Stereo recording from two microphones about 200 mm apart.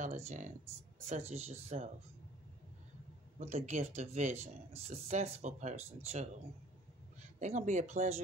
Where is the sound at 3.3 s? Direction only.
35° right (ahead or behind).